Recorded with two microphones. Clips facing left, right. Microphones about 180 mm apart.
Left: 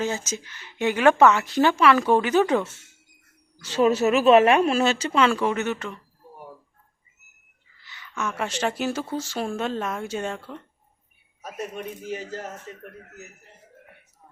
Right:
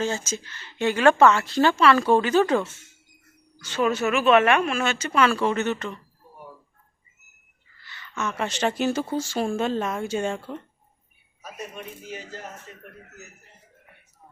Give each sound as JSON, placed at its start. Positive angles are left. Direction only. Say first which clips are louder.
{"t": 0.0, "sound": "a woman's voice", "louder": "even", "side_deg": 15}
{"t": 3.6, "sound": "a woman's voice", "louder": "left 4 dB", "side_deg": 35}
{"t": 5.5, "sound": "a woman's voice", "louder": "right 1 dB", "side_deg": 10}
{"t": 7.8, "sound": "a sound", "louder": "right 1 dB", "side_deg": 15}
{"t": 8.3, "sound": "speech", "louder": "right 1 dB", "side_deg": 5}
{"t": 11.4, "sound": "speech", "louder": "left 4 dB", "side_deg": 50}